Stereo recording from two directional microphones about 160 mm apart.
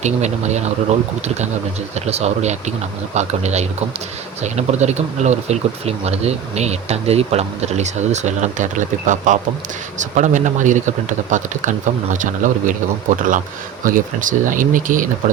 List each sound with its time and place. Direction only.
0.0 s speech: 45° right (ahead or behind)
2.0 s speech: 40° right (ahead or behind)
13.8 s speech: 55° right (ahead or behind)